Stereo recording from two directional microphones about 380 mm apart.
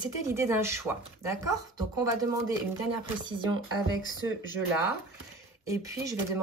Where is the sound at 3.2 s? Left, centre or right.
Centre.